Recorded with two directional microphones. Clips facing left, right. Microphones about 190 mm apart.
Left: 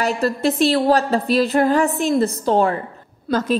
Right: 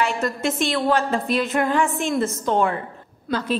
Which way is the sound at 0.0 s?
35° left (ahead or behind).